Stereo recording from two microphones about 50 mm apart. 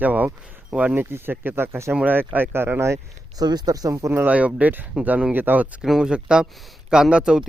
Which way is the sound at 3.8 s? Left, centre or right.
Right.